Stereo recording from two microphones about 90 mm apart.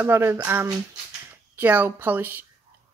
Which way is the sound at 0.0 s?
25° right (ahead or behind).